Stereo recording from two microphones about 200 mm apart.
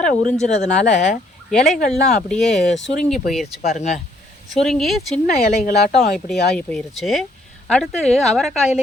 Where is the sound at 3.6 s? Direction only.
35° left (ahead or behind).